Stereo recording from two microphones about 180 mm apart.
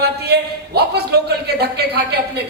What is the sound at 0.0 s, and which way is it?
A man's voice, 65° right (ahead or behind).